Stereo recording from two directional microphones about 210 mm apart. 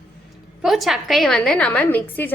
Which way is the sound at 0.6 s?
Centre (ahead or behind).